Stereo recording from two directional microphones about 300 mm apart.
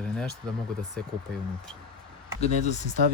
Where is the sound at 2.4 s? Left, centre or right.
Left.